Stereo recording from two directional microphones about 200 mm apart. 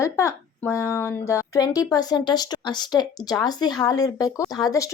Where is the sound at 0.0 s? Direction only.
15° left (ahead or behind).